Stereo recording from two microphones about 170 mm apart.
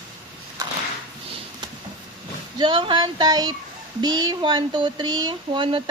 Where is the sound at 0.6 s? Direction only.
20° right (ahead or behind).